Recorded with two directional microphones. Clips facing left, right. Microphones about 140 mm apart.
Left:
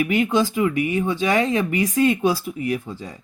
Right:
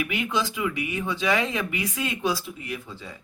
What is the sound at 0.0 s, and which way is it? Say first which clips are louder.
Speech: left 8 dB; 40° left (ahead or behind).